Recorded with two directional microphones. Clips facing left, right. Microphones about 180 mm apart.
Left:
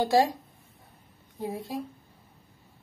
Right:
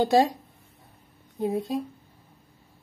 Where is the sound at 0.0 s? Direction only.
20° right (ahead or behind).